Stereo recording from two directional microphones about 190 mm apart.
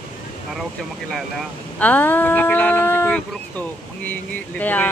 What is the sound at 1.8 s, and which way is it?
Speech, 10° left (ahead or behind).